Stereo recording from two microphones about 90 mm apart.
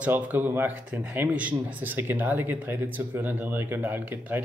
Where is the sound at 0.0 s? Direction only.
20° right (ahead or behind).